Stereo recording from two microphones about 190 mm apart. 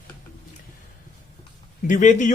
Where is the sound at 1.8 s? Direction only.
40° left (ahead or behind).